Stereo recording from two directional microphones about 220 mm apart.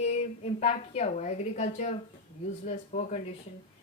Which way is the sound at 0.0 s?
30° left (ahead or behind).